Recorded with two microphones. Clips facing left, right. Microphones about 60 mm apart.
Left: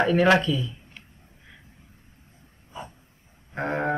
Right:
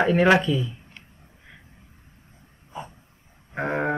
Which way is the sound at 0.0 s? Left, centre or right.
Centre.